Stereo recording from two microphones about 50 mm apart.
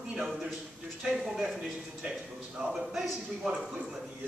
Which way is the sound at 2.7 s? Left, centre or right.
Centre.